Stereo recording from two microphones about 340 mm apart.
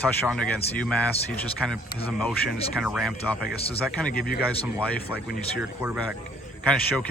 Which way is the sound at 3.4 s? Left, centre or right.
Centre.